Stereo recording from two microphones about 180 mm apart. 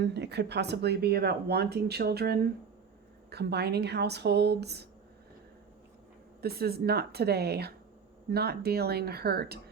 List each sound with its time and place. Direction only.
0.0 s speech: 70° right (ahead or behind)
6.4 s speech: 60° right (ahead or behind)